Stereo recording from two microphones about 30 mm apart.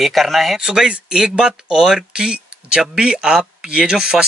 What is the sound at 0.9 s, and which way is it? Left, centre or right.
Speech, right.